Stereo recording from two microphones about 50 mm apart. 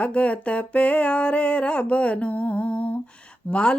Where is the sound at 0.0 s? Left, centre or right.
Left.